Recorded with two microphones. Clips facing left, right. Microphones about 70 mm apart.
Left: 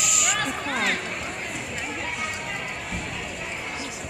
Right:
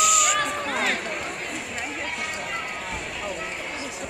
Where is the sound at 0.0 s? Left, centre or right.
Centre.